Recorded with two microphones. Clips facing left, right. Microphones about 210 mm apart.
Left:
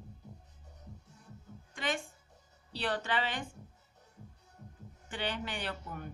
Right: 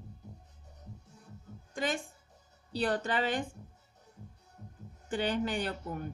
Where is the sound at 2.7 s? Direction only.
45° right (ahead or behind).